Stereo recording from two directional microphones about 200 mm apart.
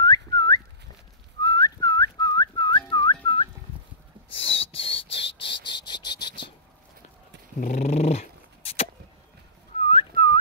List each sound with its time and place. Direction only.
0.0 s whistling: 20° left (ahead or behind)
4.4 s cricket: 30° left (ahead or behind)
7.6 s dog: 35° left (ahead or behind)
9.8 s whistling: 30° left (ahead or behind)